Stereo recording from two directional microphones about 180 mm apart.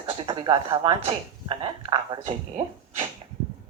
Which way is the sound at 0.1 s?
25° right (ahead or behind).